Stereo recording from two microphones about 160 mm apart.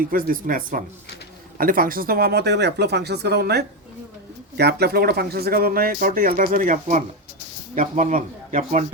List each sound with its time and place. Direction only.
0.0 s speech: 60° right (ahead or behind)